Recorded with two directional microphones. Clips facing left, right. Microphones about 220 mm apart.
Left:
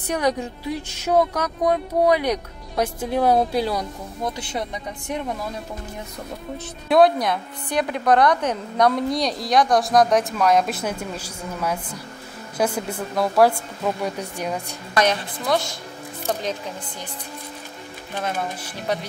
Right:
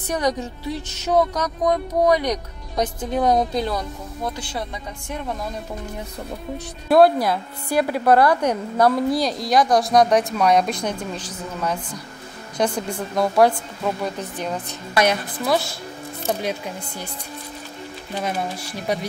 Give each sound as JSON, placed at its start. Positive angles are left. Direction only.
{"t": 0.4, "sound": "speech", "side_deg": 10}
{"t": 4.4, "sound": "speech", "side_deg": 20}
{"t": 6.9, "sound": "a woman's voice", "side_deg": -5}
{"t": 15.0, "sound": "a woman's voice", "side_deg": -10}
{"t": 18.1, "sound": "a woman's voice", "side_deg": -10}